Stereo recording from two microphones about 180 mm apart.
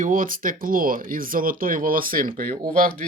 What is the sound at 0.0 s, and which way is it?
Speech, 45° right (ahead or behind).